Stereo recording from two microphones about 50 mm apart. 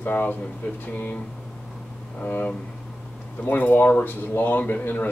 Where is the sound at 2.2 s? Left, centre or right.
Left.